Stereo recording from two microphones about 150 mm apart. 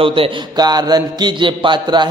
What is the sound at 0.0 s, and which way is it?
A man's voice, 35° right (ahead or behind).